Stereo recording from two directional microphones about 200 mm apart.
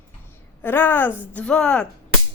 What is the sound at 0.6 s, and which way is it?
A woman's voice, 10° left (ahead or behind).